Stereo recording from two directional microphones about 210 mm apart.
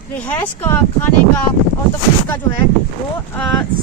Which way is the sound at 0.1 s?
10° left (ahead or behind).